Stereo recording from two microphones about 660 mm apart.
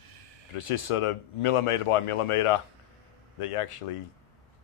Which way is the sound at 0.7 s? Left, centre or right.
Left.